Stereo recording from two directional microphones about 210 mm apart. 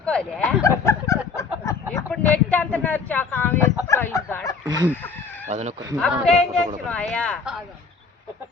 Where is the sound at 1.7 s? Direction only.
15° left (ahead or behind).